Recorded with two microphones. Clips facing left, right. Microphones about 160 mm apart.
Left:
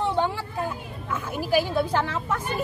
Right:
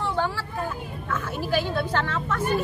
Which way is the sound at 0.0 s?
20° left (ahead or behind).